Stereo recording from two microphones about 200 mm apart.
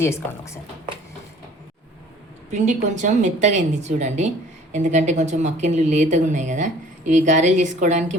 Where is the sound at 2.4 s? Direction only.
35° right (ahead or behind).